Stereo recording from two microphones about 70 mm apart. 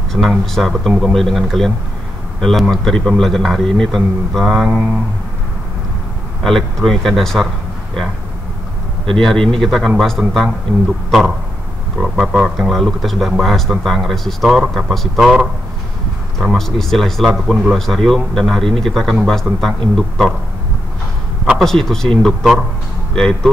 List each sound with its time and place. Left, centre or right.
0.1 s speech: right
0.5 s speech: centre
6.4 s speech: centre
9.0 s speech: centre
21.5 s speech: centre